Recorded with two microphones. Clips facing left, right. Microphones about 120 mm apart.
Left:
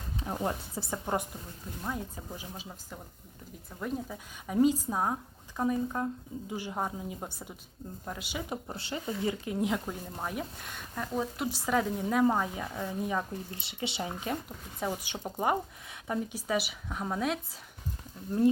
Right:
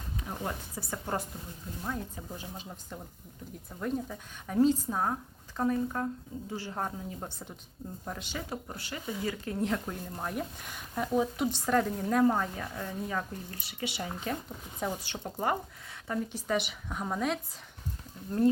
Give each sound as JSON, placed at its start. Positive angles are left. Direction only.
{"t": 0.2, "sound": "speech", "side_deg": 30}
{"t": 14.8, "sound": "speech", "side_deg": 10}